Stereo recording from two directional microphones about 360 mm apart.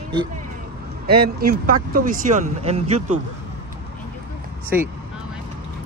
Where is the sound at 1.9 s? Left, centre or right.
Right.